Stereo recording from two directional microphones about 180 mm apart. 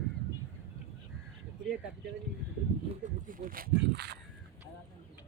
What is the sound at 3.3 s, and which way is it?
Speech, 50° right (ahead or behind).